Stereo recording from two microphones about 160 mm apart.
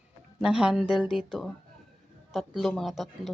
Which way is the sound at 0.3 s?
5° right (ahead or behind).